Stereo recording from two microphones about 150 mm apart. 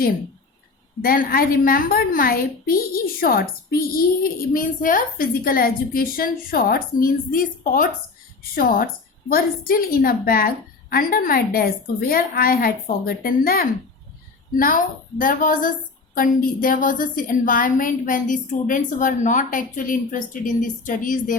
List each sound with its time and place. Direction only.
1.0 s a woman's voice: 75° left (ahead or behind)
14.5 s a woman's voice: 70° left (ahead or behind)
16.1 s a woman's voice: 75° left (ahead or behind)